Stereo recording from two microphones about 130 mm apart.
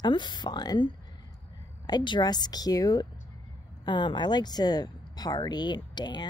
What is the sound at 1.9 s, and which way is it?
Speech, 35° left (ahead or behind).